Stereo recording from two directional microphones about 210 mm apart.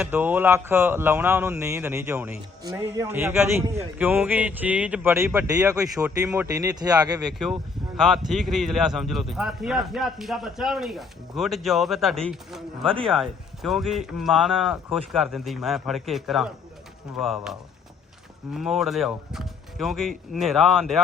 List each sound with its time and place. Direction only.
0.0 s speech: 10° right (ahead or behind)
7.9 s speech: centre (ahead or behind)